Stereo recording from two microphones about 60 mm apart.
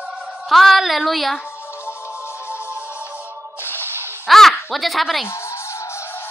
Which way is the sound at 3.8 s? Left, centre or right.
Right.